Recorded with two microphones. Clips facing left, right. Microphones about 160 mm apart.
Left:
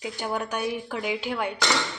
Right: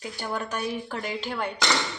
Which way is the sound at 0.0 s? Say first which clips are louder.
Left 2 dB; 15° left (ahead or behind).